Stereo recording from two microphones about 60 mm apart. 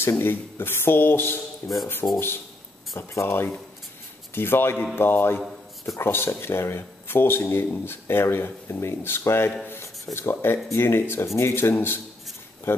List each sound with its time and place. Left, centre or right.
0.0 s speech: left